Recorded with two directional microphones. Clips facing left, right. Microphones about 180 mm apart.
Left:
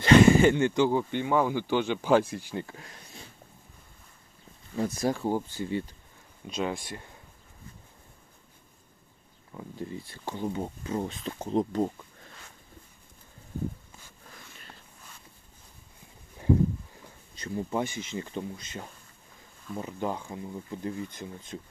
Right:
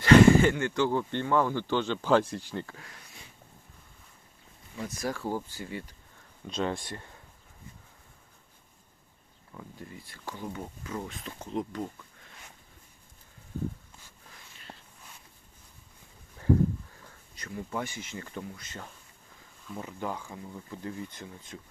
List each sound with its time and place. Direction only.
0.0 s speech: 20° left (ahead or behind)
2.7 s a sound: 25° left (ahead or behind)
4.8 s speech: 30° left (ahead or behind)
6.5 s speech: 10° left (ahead or behind)
9.6 s speech: 25° left (ahead or behind)
14.7 s a sound: 30° right (ahead or behind)
17.0 s speech: 25° left (ahead or behind)